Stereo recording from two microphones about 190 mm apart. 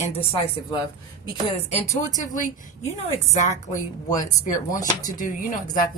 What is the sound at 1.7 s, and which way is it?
Speech, 35° left (ahead or behind).